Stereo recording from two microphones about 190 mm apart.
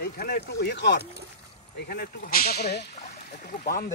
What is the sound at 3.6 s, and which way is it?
Speech, 50° left (ahead or behind).